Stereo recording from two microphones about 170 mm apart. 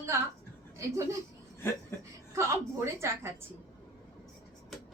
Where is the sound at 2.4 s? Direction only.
15° right (ahead or behind).